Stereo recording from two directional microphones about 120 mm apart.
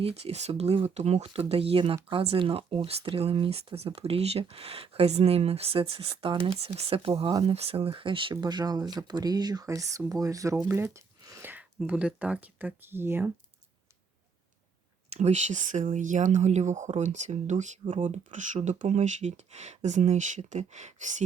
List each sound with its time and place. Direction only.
0.0 s speech: 55° right (ahead or behind); by 13.3 s 20° right (ahead or behind)
15.1 s speech: 70° right (ahead or behind); by 21.2 s 85° right